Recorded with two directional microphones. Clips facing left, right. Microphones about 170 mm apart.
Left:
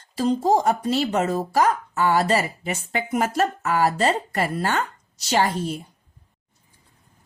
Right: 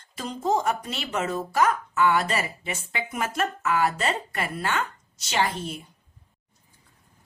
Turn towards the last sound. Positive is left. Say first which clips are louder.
# left 5 dB
turn(degrees=40)  # may be behind; listen again after turning